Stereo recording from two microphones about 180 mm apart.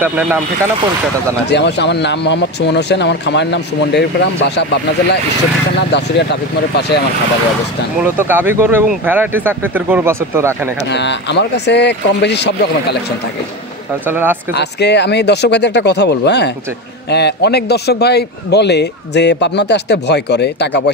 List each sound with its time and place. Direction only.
0.0 s speech: 10° right (ahead or behind)
1.5 s a man's voice: 70° left (ahead or behind)
5.9 s a man's voice: 70° left (ahead or behind)
8.0 s speech: 10° right (ahead or behind)
10.9 s a man's voice: 75° left (ahead or behind)
14.0 s speech: 10° right (ahead or behind)
14.5 s a man's voice: 70° left (ahead or behind)